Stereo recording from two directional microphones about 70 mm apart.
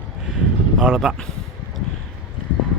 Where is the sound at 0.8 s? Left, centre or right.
Centre.